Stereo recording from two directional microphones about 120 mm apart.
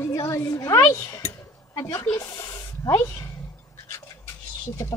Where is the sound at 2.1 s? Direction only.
30° left (ahead or behind).